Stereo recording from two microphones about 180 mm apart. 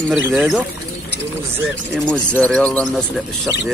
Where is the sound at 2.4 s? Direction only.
5° left (ahead or behind).